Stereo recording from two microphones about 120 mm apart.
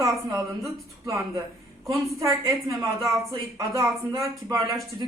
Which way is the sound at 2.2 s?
25° right (ahead or behind).